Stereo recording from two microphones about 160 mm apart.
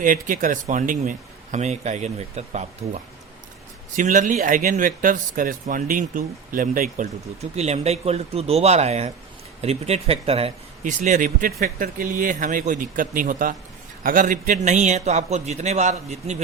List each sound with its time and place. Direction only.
0.0 s a man's voice: 55° right (ahead or behind)
7.5 s speech: 40° right (ahead or behind)
10.8 s a man's voice: 50° right (ahead or behind)